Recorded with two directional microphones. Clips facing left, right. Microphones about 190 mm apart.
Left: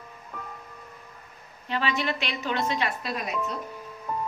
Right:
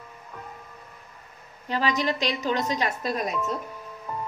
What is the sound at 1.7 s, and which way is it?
Speech, 40° right (ahead or behind).